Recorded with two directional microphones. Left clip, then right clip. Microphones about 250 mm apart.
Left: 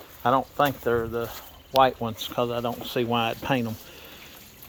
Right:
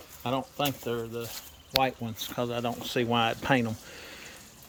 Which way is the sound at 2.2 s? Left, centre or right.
Centre.